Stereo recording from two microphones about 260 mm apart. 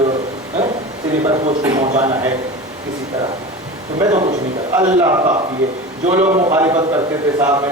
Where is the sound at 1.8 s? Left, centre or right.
Right.